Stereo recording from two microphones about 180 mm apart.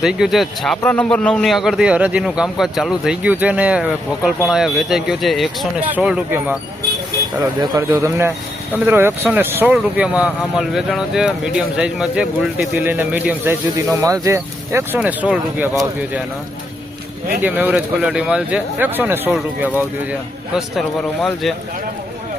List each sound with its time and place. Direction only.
0.0 s a man's voice: 5° right (ahead or behind)
7.6 s speech: 20° right (ahead or behind)
17.4 s speech: 10° right (ahead or behind)
20.7 s a man's voice: 5° left (ahead or behind)